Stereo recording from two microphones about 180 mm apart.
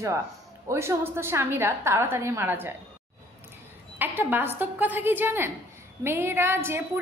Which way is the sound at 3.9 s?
10° right (ahead or behind).